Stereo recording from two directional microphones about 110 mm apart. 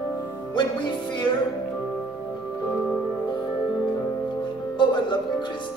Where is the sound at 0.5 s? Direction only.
45° left (ahead or behind).